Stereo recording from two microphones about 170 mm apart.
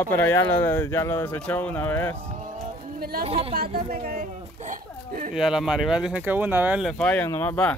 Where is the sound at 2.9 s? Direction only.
60° right (ahead or behind).